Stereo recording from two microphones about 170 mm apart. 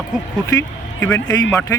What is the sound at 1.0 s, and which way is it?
Speech, 15° left (ahead or behind).